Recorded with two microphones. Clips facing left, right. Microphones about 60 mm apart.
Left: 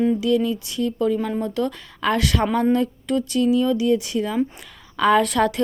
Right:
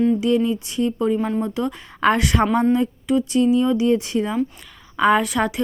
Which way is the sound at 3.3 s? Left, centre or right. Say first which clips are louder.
Right 1 dB; right.